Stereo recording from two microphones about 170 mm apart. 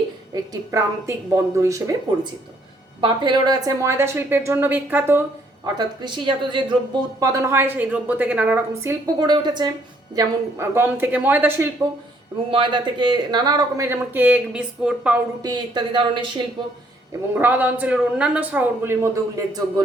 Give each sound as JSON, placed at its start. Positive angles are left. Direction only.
{"t": 0.3, "sound": "speech", "side_deg": -20}
{"t": 3.0, "sound": "a man's voice", "side_deg": -25}
{"t": 5.7, "sound": "speech", "side_deg": -25}
{"t": 7.2, "sound": "a man's voice", "side_deg": -15}
{"t": 10.2, "sound": "a man's voice", "side_deg": -15}
{"t": 12.5, "sound": "speech", "side_deg": -30}
{"t": 15.4, "sound": "speech", "side_deg": -25}
{"t": 17.3, "sound": "a man's voice", "side_deg": -10}